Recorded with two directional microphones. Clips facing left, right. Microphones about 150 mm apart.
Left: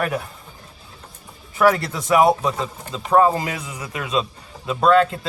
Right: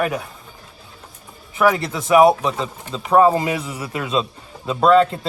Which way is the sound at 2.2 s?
Centre (ahead or behind).